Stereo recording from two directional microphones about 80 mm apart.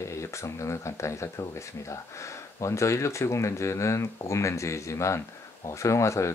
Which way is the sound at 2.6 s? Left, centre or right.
Left.